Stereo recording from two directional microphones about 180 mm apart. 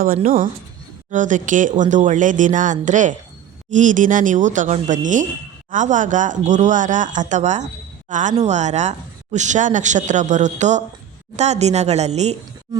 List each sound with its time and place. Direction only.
0.0 s a woman's voice: 50° right (ahead or behind)